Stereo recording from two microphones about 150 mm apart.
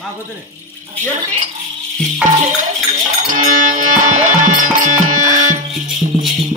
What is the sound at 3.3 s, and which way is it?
Music, 55° right (ahead or behind).